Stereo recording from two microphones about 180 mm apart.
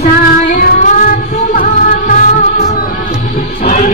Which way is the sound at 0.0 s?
55° left (ahead or behind).